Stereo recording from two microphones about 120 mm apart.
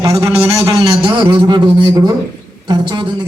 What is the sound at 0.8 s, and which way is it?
A man's voice, 45° right (ahead or behind).